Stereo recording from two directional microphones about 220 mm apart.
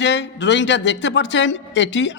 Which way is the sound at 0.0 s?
55° left (ahead or behind).